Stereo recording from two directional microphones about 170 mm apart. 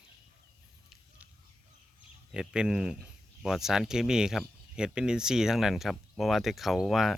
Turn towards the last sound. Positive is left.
turn(degrees=0)  # may be behind; listen again after turning